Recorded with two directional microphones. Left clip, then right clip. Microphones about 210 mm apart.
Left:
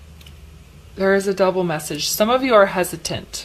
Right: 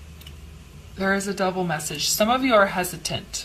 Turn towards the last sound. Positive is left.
turn(degrees=45)  # may be behind; listen again after turning